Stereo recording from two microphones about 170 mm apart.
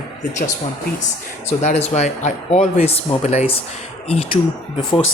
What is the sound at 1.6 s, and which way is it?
Speech, 40° left (ahead or behind).